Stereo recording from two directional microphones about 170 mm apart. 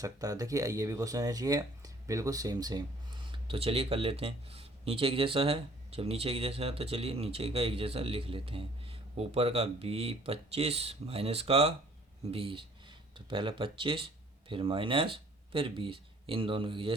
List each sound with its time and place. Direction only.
0.0 s speech: 20° right (ahead or behind)